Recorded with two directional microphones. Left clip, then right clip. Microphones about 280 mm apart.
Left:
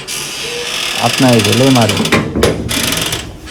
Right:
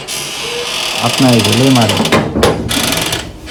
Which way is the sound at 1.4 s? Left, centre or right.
Centre.